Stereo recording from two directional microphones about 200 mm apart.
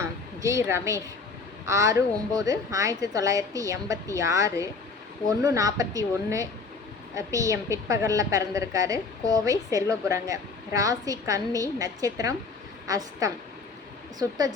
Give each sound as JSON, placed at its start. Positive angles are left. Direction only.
{"t": 0.0, "sound": "a woman's voice", "side_deg": -15}